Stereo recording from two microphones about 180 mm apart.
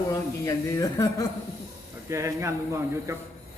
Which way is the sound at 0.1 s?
20° left (ahead or behind).